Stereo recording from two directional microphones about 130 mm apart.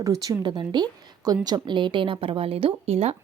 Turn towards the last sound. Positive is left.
turn(degrees=-55)  # may be behind; listen again after turning